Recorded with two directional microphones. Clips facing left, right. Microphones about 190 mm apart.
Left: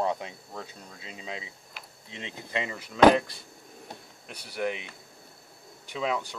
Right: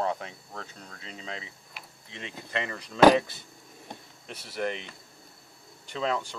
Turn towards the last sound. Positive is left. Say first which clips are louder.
# even
turn(degrees=5)  # may be behind; listen again after turning